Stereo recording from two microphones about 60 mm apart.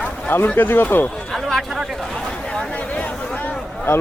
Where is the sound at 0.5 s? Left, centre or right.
Left.